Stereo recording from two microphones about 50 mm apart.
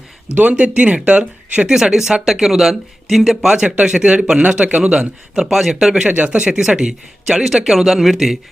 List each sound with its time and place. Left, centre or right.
0.3 s speech: right
1.6 s a man's voice: centre
5.5 s a man's voice: centre
6.0 s a man's voice: right; by 8.4 s centre